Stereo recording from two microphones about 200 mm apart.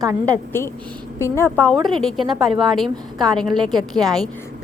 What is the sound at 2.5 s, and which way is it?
Speech, 25° right (ahead or behind).